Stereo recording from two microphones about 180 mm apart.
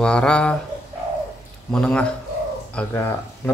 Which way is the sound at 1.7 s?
5° left (ahead or behind).